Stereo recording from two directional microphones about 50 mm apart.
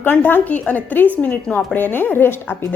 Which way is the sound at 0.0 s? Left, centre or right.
Left.